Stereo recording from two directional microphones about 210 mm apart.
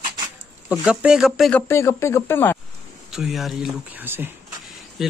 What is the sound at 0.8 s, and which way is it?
Speech, 5° right (ahead or behind).